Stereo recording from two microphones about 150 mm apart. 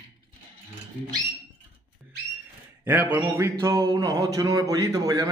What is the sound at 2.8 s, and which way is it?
Speech, 10° right (ahead or behind).